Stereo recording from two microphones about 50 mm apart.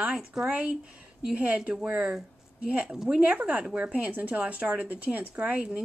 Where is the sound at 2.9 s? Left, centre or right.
Centre.